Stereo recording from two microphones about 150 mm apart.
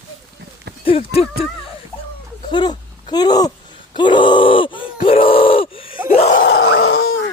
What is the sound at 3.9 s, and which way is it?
Groan, 30° left (ahead or behind).